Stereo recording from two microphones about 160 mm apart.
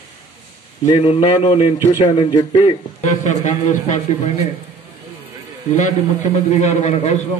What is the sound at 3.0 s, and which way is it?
A man's voice, 50° left (ahead or behind).